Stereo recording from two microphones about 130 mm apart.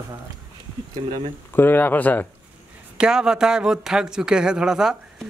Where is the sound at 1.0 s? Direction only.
45° right (ahead or behind).